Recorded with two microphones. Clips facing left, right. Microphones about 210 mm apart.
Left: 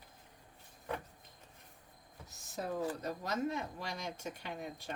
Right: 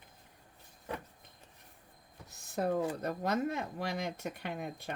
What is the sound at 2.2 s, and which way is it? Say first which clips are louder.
Speech: right 7 dB; 55° right (ahead or behind).